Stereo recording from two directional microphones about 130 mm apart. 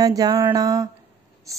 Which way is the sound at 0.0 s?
30° right (ahead or behind).